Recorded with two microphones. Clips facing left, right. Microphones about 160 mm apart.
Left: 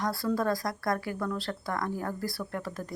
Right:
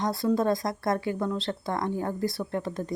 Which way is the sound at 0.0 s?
20° right (ahead or behind).